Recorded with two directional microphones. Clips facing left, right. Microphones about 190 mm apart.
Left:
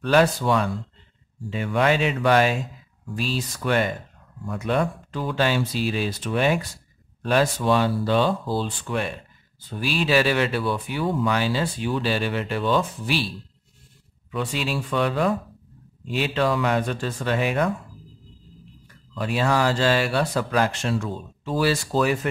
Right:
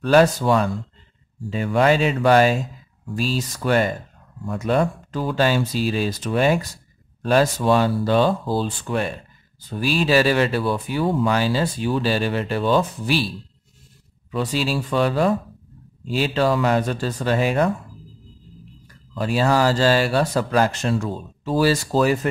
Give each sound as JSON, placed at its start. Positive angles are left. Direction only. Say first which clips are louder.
{"t": 0.0, "sound": "speech", "louder": "right 3 dB", "side_deg": -40}
{"t": 14.3, "sound": "speech", "louder": "right 4 dB", "side_deg": -35}
{"t": 19.1, "sound": "speech", "louder": "right 3 dB", "side_deg": -35}